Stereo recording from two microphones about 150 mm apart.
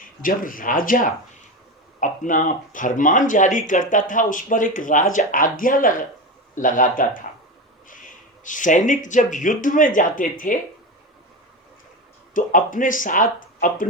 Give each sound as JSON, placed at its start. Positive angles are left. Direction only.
{"t": 0.2, "sound": "speech", "side_deg": 65}
{"t": 8.4, "sound": "speech", "side_deg": 60}
{"t": 12.3, "sound": "speech", "side_deg": 60}